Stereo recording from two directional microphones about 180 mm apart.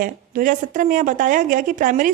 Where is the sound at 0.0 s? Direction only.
50° right (ahead or behind).